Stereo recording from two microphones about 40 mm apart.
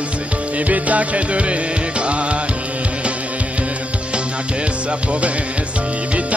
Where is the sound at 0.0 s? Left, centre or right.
Right.